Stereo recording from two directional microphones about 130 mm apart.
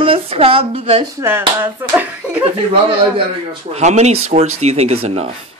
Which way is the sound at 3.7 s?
60° right (ahead or behind).